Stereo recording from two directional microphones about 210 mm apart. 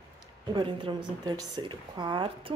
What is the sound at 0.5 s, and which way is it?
A woman's voice, 25° right (ahead or behind).